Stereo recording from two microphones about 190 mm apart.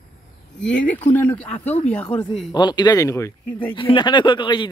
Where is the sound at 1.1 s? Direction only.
10° left (ahead or behind).